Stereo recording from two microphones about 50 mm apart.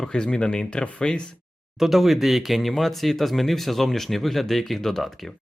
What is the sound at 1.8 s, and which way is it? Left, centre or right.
Speech, centre.